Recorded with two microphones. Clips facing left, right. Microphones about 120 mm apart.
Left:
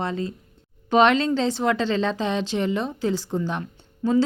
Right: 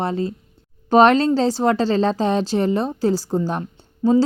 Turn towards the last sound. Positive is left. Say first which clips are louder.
# right 4 dB
turn(degrees=-35)  # may be behind; listen again after turning